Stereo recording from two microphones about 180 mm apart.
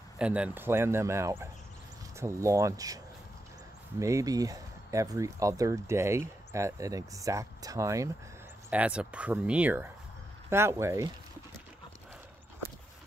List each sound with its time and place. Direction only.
0.2 s speech: 5° right (ahead or behind)
4.0 s speech: 15° right (ahead or behind)